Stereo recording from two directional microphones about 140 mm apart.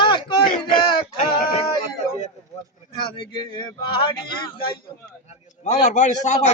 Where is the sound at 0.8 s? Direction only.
35° left (ahead or behind).